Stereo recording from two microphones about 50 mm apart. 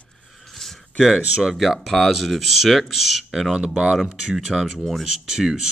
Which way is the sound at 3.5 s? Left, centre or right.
Centre.